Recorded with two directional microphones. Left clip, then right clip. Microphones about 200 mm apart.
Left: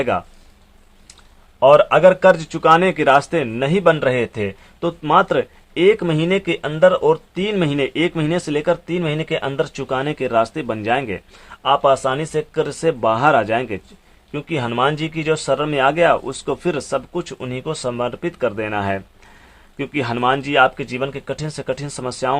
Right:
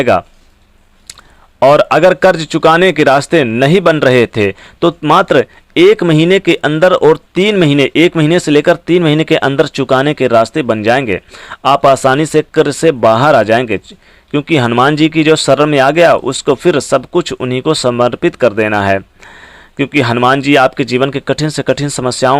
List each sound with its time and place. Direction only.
0.0 s speech: 35° right (ahead or behind)
1.5 s speech: 40° right (ahead or behind)